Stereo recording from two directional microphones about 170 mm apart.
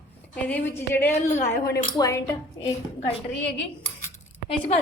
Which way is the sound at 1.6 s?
70° left (ahead or behind).